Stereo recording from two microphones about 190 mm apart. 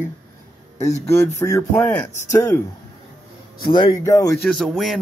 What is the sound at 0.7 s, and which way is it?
Speech, 35° left (ahead or behind).